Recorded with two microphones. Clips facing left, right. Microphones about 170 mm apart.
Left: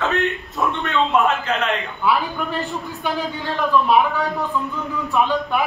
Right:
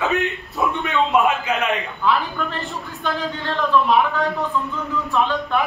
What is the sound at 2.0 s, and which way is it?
Speech, 10° left (ahead or behind).